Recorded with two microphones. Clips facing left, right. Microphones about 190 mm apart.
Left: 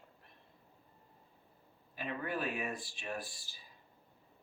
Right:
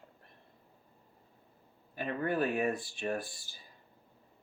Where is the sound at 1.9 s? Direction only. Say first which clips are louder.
Right 6 dB; 50° right (ahead or behind).